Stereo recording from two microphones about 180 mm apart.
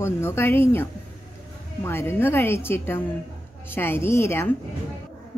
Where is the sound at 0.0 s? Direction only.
15° left (ahead or behind).